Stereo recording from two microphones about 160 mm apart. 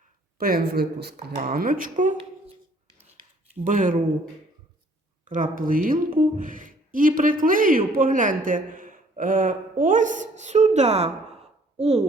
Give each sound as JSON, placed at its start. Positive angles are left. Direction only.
{"t": 0.3, "sound": "a woman's voice", "side_deg": -65}
{"t": 3.6, "sound": "a woman's voice", "side_deg": -55}
{"t": 5.3, "sound": "a woman's voice", "side_deg": -55}